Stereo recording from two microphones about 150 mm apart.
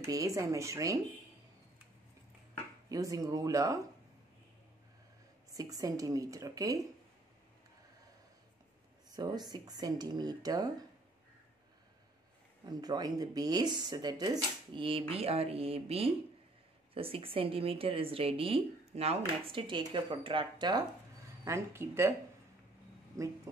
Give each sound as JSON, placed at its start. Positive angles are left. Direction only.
{"t": 0.0, "sound": "speech", "side_deg": -20}
{"t": 2.9, "sound": "speech", "side_deg": -25}
{"t": 5.5, "sound": "speech", "side_deg": -25}
{"t": 9.1, "sound": "speech", "side_deg": -25}
{"t": 12.6, "sound": "speech", "side_deg": -25}
{"t": 21.5, "sound": "speech", "side_deg": -15}
{"t": 23.1, "sound": "speech", "side_deg": -20}